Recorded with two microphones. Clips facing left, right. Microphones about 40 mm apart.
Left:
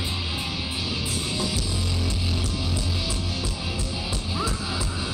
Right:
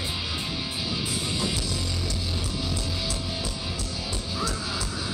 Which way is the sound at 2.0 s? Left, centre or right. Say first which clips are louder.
Left 2 dB; left.